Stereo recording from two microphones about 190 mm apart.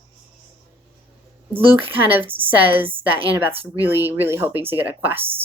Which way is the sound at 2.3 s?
10° right (ahead or behind).